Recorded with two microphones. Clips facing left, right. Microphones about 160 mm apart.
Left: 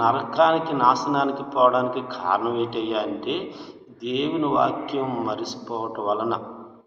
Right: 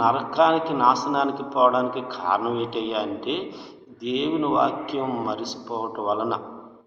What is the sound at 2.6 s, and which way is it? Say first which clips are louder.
Speech: left 2 dB; 45° left (ahead or behind).